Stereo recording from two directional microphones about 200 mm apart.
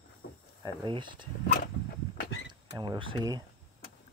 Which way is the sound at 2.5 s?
20° right (ahead or behind).